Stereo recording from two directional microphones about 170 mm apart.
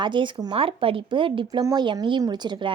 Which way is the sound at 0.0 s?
30° right (ahead or behind).